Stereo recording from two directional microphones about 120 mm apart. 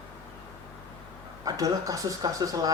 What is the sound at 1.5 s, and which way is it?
A man's voice, 30° right (ahead or behind).